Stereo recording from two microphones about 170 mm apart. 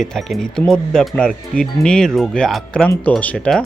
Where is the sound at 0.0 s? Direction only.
Centre (ahead or behind).